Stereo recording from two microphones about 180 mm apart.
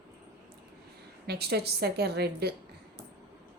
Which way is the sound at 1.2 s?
65° right (ahead or behind).